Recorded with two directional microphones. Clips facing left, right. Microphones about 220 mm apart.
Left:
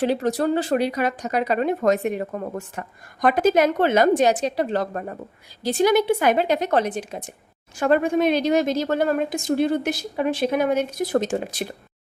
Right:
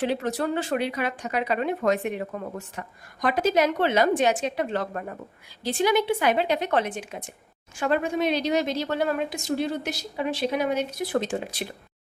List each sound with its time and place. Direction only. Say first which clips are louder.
0.0 s a woman's voice: left 5 dB; 40° left (ahead or behind)
7.8 s a woman's voice: left 5 dB; 50° left (ahead or behind)